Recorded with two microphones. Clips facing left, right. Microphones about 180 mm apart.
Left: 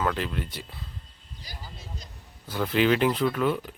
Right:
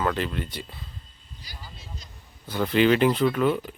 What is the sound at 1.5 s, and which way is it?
Speech, 45° left (ahead or behind).